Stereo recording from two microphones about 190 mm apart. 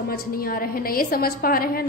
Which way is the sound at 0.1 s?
50° left (ahead or behind).